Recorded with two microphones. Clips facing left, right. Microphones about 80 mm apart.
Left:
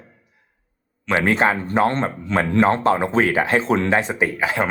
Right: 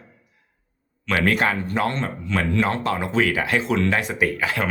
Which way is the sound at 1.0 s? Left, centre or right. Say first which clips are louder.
Left 3 dB; left.